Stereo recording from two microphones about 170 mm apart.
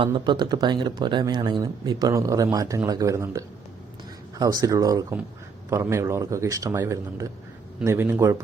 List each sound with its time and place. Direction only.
0.0 s speech: 25° right (ahead or behind)